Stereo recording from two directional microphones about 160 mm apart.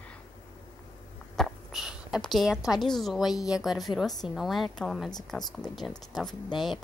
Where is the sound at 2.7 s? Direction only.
Centre (ahead or behind).